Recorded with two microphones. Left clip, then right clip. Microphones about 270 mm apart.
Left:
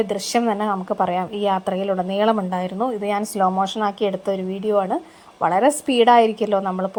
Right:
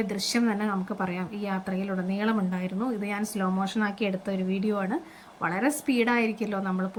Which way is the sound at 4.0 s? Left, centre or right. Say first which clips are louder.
Left 8 dB; left.